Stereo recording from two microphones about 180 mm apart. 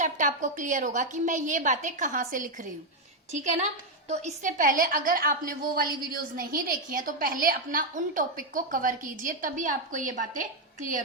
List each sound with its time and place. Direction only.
0.0 s a woman's voice: 45° right (ahead or behind)